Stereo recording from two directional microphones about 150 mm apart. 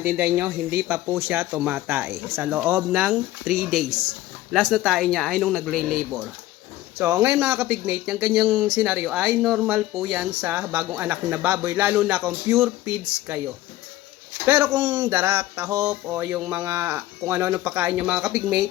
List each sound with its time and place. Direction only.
0.0 s speech: 10° right (ahead or behind)
7.0 s speech: 15° right (ahead or behind)
14.4 s speech: 15° right (ahead or behind)